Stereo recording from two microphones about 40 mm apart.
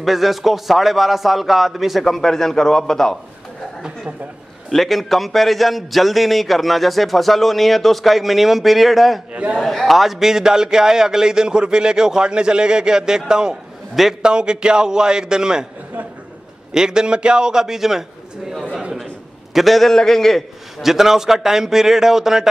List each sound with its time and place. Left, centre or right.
0.0 s a man's voice: centre
2.0 s a man's voice: centre
4.6 s a man's voice: centre
9.3 s a man's voice: right
9.6 s a man's voice: centre
16.7 s a man's voice: centre
19.5 s a man's voice: centre
19.9 s a man's voice: centre
20.8 s a man's voice: centre